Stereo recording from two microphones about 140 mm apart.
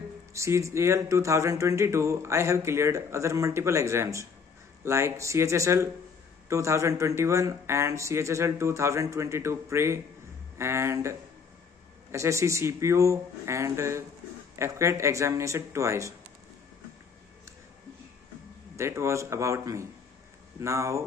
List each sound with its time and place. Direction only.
0.3 s speech: 20° right (ahead or behind)
18.8 s speech: 20° right (ahead or behind)